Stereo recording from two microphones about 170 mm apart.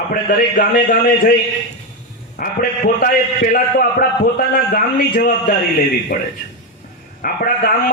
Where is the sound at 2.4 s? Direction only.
55° left (ahead or behind).